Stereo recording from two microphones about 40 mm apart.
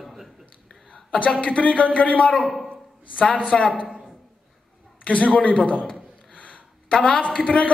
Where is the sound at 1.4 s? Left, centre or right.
Left.